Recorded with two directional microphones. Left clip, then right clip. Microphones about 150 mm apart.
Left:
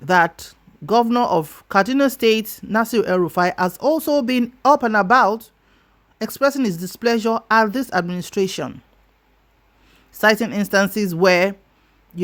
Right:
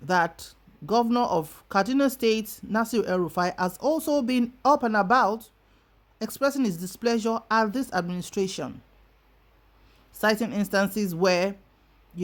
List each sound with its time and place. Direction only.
0.0 s speech: 45° left (ahead or behind)
10.1 s speech: 45° left (ahead or behind)